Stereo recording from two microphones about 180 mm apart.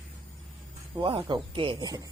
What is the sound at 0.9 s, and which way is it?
Speech, 25° right (ahead or behind).